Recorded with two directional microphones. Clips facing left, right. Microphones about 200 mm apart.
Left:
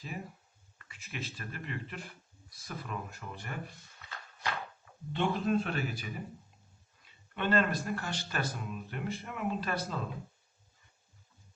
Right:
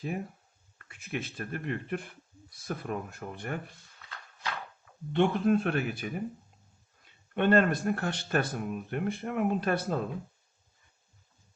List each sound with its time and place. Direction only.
0.8 s speech: 55° right (ahead or behind)
4.4 s a sound: 10° left (ahead or behind)
5.1 s speech: 55° right (ahead or behind)